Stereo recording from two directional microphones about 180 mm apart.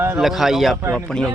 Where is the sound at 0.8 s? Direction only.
15° right (ahead or behind).